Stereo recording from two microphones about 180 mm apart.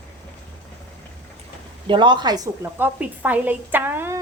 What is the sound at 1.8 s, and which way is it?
A woman's voice, 25° right (ahead or behind).